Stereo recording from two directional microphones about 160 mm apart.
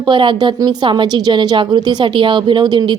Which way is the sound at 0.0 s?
30° right (ahead or behind).